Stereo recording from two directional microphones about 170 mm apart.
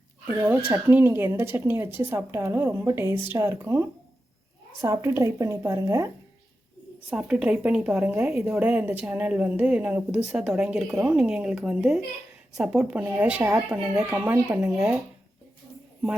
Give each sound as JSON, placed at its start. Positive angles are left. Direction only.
{"t": 0.3, "sound": "speech", "side_deg": -10}
{"t": 7.1, "sound": "speech", "side_deg": -5}